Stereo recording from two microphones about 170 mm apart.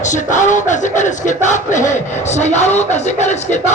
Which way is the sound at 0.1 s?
45° left (ahead or behind).